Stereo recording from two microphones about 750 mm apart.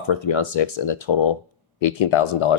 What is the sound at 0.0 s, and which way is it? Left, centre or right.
Speech, left.